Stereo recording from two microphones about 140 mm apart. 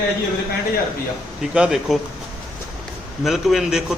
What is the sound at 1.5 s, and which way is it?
Speech, 5° right (ahead or behind).